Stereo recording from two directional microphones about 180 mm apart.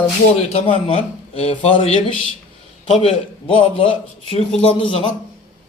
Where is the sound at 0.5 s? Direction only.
35° left (ahead or behind).